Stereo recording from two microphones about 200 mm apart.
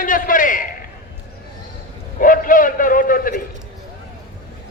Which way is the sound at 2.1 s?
45° left (ahead or behind).